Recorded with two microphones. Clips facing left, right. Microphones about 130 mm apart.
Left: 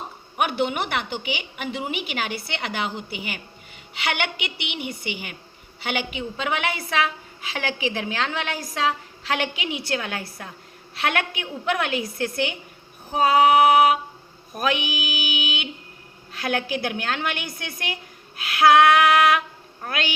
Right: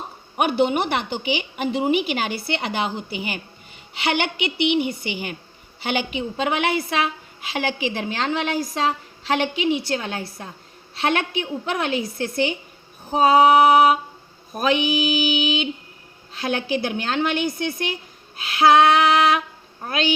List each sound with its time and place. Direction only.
0.3 s a woman's voice: 35° right (ahead or behind)